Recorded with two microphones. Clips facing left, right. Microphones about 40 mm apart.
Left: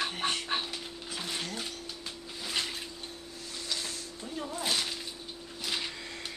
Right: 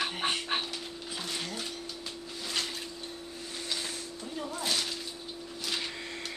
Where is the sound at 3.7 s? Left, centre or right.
Centre.